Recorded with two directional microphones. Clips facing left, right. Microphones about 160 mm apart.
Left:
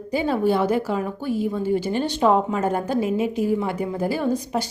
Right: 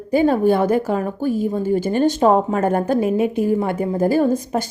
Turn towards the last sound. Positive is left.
turn(degrees=-45)  # may be behind; listen again after turning